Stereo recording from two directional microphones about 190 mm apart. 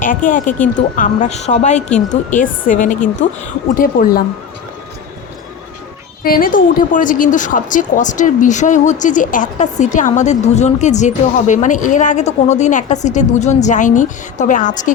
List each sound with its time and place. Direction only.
0.0 s a woman's voice: 45° left (ahead or behind)
6.2 s a woman's voice: 50° left (ahead or behind)